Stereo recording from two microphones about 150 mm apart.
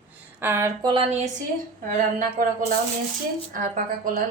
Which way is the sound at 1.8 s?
65° right (ahead or behind).